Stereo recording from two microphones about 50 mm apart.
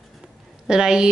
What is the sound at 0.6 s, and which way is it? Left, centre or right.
Speech, centre.